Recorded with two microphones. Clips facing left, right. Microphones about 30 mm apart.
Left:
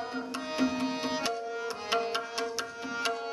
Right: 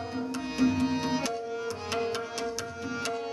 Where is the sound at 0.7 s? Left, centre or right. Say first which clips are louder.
Right 4 dB; centre.